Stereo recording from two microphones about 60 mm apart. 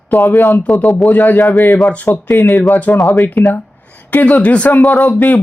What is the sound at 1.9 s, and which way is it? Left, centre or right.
Speech, left.